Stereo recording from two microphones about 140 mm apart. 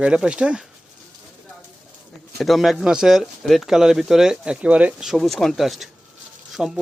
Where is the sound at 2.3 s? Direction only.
Centre (ahead or behind).